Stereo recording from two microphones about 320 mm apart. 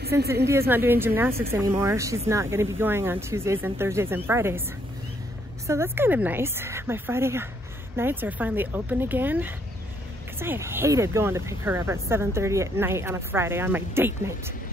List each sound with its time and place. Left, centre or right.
0.0 s a woman's voice: right
0.5 s speech: centre
5.7 s speech: centre